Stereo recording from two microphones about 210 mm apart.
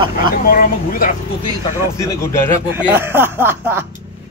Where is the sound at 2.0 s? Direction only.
15° left (ahead or behind).